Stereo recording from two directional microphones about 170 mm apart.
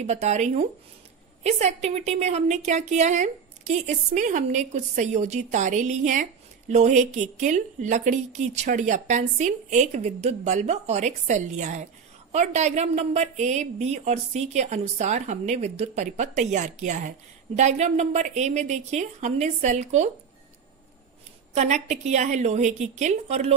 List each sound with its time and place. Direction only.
0.0 s a woman's voice: 40° right (ahead or behind)
21.5 s a woman's voice: 45° right (ahead or behind)